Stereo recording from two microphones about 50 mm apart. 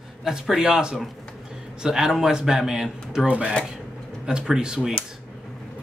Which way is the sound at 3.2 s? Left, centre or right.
Right.